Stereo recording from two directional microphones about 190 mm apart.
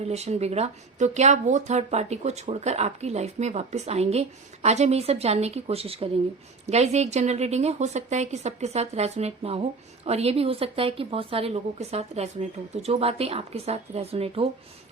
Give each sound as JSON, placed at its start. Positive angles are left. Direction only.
{"t": 0.0, "sound": "speech", "side_deg": -35}